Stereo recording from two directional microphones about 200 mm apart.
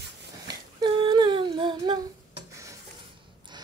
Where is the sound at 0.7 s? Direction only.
20° right (ahead or behind).